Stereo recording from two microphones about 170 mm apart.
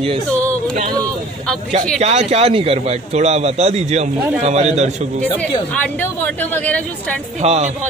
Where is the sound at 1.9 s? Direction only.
40° right (ahead or behind).